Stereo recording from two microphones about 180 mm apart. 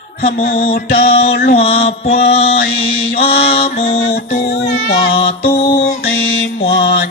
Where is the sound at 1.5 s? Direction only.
30° left (ahead or behind).